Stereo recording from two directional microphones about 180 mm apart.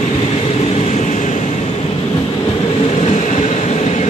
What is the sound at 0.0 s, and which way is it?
Vehicle, 35° left (ahead or behind).